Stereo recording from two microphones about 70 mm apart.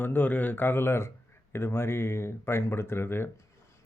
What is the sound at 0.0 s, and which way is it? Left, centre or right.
A man's voice, left.